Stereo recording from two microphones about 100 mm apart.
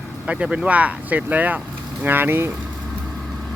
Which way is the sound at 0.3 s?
10° right (ahead or behind).